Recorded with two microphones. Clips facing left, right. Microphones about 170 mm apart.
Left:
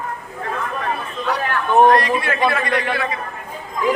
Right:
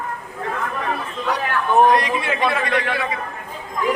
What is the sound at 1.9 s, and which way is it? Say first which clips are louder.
Speech: left 2 dB; 15° right (ahead or behind).